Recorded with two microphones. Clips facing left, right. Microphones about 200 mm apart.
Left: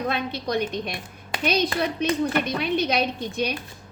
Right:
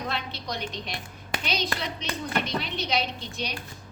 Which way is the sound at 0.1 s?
55° left (ahead or behind).